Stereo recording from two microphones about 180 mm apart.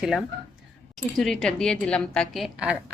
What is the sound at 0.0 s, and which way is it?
A woman's voice, centre (ahead or behind).